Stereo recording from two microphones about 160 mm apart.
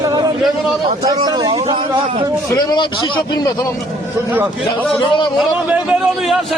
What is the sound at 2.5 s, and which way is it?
A man's voice, 25° left (ahead or behind).